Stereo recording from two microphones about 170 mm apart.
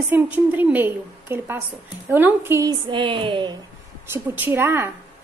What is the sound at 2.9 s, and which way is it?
Speech, 30° right (ahead or behind).